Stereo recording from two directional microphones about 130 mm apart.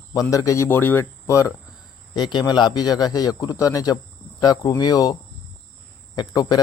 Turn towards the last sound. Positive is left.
turn(degrees=35)  # may be behind; listen again after turning